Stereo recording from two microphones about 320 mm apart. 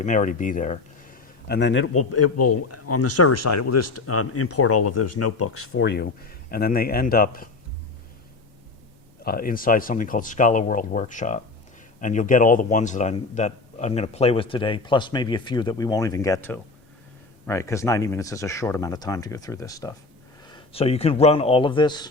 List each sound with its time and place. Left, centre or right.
0.0 s a man's voice: left
9.2 s speech: left